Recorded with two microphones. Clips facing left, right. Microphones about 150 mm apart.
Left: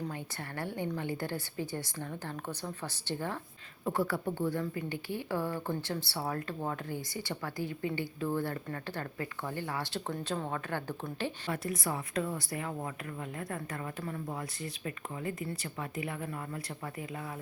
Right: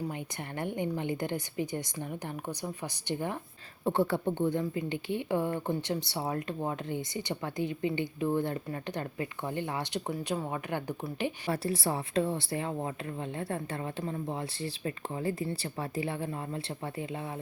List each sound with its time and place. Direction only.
0.0 s a woman's voice: 20° right (ahead or behind)
11.5 s a woman's voice: 30° right (ahead or behind)